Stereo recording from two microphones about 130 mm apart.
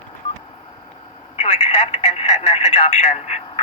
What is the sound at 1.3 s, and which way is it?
Speech, 50° left (ahead or behind).